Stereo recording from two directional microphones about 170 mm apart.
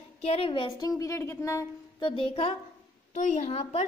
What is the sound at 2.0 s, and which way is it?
Speech, 30° left (ahead or behind).